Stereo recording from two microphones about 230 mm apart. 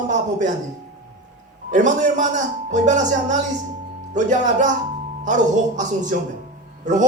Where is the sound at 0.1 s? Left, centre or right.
Right.